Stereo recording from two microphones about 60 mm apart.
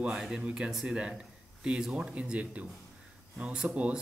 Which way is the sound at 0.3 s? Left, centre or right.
Centre.